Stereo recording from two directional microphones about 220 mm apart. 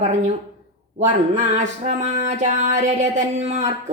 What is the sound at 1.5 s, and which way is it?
Music, 30° right (ahead or behind).